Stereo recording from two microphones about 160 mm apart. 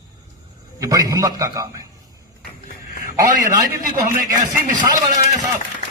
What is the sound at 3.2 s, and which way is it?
Speech, 20° right (ahead or behind).